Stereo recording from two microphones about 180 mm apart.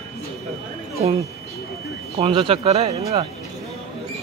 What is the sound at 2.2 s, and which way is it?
Speech, 30° right (ahead or behind).